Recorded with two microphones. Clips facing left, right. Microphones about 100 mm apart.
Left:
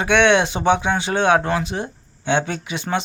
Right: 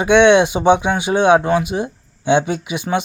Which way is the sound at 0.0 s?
15° right (ahead or behind).